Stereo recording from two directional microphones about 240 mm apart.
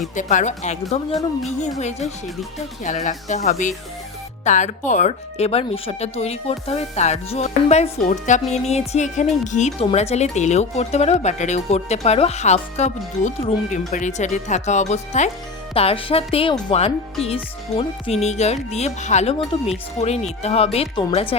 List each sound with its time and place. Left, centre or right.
0.2 s speech: left